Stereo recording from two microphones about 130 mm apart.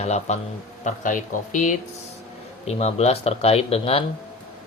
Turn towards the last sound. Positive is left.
turn(degrees=50)  # may be behind; listen again after turning